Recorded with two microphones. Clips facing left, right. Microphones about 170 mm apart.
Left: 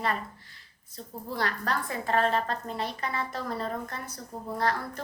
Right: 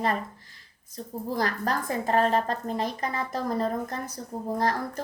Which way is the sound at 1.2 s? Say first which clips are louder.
Right 3 dB; 40° right (ahead or behind).